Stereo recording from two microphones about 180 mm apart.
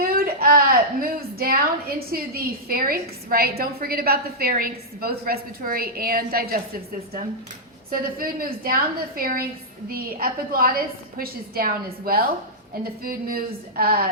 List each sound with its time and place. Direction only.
0.0 s a sound: 55° right (ahead or behind)
2.1 s a woman's voice: 55° right (ahead or behind)
7.9 s a woman's voice: 55° right (ahead or behind)